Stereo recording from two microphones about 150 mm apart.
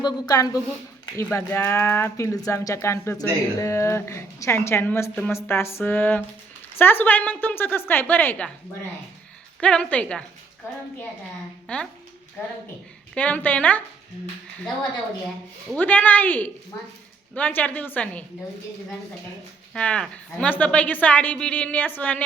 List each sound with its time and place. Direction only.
0.0 s a woman's voice: 25° left (ahead or behind)
9.6 s a woman's voice: 5° left (ahead or behind)
11.7 s a woman's voice: 10° left (ahead or behind)
13.1 s a woman's voice: 10° left (ahead or behind)
15.7 s a woman's voice: 10° left (ahead or behind)
19.7 s a woman's voice: 5° left (ahead or behind)